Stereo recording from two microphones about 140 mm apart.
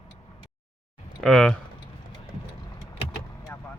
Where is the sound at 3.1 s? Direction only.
25° left (ahead or behind).